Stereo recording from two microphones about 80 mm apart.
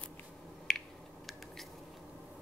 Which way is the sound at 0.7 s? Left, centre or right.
Centre.